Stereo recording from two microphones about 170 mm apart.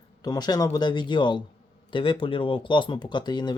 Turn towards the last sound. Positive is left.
turn(degrees=25)  # may be behind; listen again after turning